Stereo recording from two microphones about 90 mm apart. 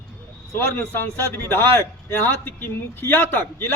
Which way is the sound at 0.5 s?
30° left (ahead or behind).